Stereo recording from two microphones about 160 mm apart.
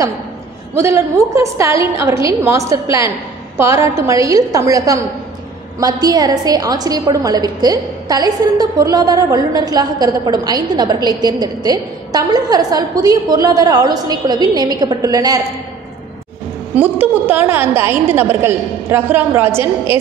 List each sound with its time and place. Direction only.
0.7 s a woman's voice: 20° right (ahead or behind)
16.7 s a woman's voice: 10° right (ahead or behind)